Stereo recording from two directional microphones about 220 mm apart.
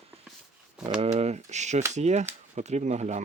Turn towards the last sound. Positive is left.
turn(degrees=-30)  # may be behind; listen again after turning